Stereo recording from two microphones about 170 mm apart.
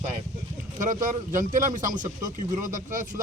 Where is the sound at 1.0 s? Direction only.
50° right (ahead or behind).